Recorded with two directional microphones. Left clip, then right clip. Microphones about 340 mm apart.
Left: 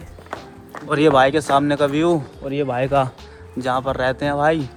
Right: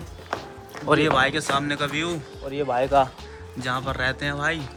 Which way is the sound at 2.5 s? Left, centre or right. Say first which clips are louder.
Left 2 dB; left.